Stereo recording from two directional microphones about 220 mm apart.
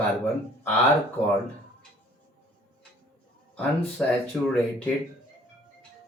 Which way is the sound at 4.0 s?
5° left (ahead or behind).